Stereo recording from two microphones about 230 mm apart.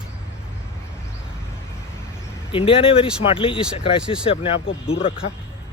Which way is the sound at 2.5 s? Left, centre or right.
Left.